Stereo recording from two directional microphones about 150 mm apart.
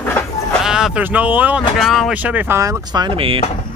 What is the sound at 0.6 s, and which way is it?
Speech, 5° right (ahead or behind).